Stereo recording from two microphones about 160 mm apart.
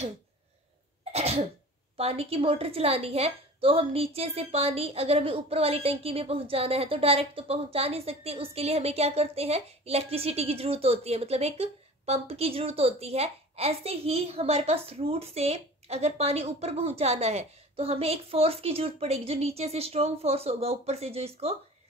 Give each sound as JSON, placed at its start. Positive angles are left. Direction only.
{"t": 1.1, "sound": "cough", "side_deg": -40}
{"t": 2.0, "sound": "a woman's voice", "side_deg": -35}